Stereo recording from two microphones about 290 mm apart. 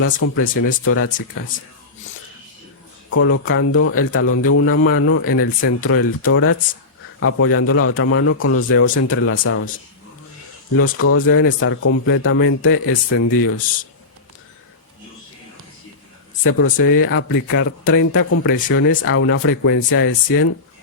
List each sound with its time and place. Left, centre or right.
0.0 s speech: left
3.1 s speech: left
10.8 s speech: left
16.4 s speech: left